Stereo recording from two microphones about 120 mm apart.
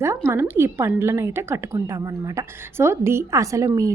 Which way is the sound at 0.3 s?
20° right (ahead or behind).